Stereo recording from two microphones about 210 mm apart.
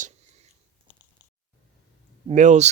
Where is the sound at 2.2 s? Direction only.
35° right (ahead or behind).